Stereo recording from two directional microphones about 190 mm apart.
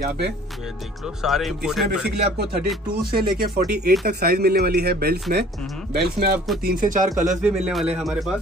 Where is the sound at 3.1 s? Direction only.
55° right (ahead or behind).